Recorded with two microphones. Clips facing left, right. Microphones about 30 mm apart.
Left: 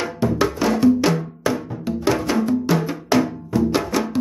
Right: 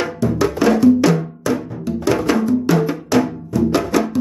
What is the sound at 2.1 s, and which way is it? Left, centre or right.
Music, centre.